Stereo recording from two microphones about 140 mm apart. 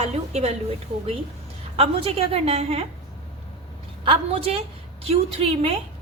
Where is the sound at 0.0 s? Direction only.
50° right (ahead or behind).